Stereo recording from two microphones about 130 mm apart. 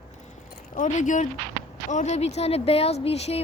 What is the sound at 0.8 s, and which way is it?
A woman's voice, 75° left (ahead or behind).